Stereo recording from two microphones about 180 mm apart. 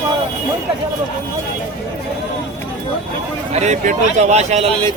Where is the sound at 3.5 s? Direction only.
40° right (ahead or behind).